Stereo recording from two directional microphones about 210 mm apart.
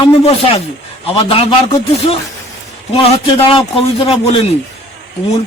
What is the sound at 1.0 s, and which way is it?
Speech, 25° left (ahead or behind).